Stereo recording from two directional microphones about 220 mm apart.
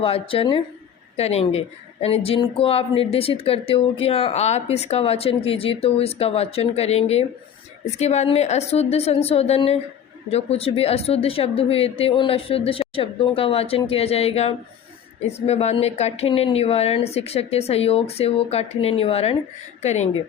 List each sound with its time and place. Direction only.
0.0 s speech: 25° left (ahead or behind)